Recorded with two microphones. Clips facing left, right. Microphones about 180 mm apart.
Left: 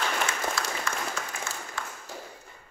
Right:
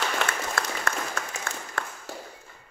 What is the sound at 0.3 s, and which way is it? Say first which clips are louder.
Applause: right 1 dB; 60° right (ahead or behind).